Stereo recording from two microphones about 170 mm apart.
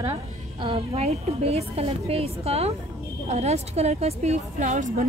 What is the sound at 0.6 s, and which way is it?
A woman's voice, 35° right (ahead or behind).